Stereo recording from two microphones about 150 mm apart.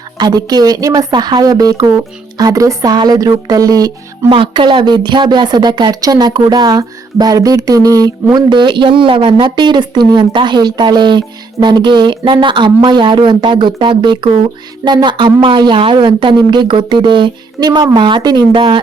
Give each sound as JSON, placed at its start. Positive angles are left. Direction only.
{"t": 0.2, "sound": "speech", "side_deg": -25}